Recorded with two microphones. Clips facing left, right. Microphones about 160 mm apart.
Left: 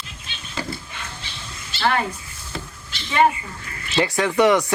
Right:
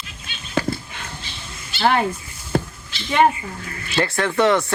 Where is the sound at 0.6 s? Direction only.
60° right (ahead or behind).